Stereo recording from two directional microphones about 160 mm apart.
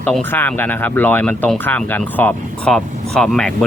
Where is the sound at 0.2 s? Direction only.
10° left (ahead or behind).